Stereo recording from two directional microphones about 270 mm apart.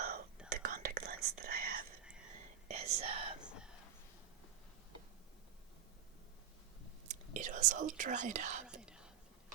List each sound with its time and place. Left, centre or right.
0.0 s whispering: right
2.6 s whispering: right
3.4 s a sound: centre
7.1 s speech: right
8.8 s whispering: centre